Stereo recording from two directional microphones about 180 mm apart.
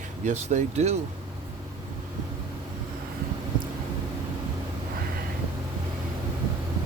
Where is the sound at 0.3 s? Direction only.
40° right (ahead or behind).